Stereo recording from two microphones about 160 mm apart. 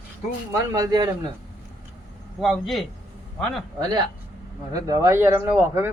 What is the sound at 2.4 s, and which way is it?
Speech, centre (ahead or behind).